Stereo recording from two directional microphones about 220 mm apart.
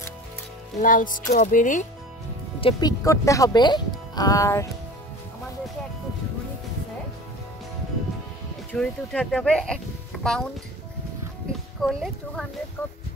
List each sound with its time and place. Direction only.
0.7 s music: 40° left (ahead or behind)
2.6 s speech: 15° left (ahead or behind)
8.7 s speech: 5° left (ahead or behind)
11.8 s speech: centre (ahead or behind)